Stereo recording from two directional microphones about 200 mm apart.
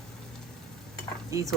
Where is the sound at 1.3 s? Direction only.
15° right (ahead or behind).